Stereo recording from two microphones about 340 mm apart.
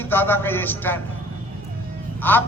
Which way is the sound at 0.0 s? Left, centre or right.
Centre.